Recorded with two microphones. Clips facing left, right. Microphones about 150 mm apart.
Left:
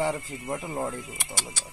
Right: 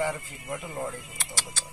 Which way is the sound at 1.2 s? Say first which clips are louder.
Left 1 dB; 10° left (ahead or behind).